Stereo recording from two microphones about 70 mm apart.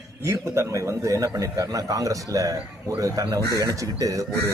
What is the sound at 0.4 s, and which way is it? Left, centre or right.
Speech, right.